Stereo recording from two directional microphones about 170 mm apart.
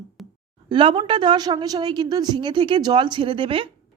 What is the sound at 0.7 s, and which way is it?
A woman's voice, 30° right (ahead or behind).